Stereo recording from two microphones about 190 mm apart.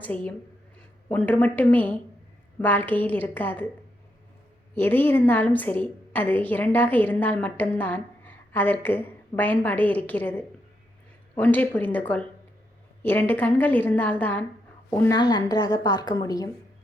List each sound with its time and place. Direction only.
0.0 s a woman's voice: 5° left (ahead or behind)
4.7 s a woman's voice: 10° left (ahead or behind)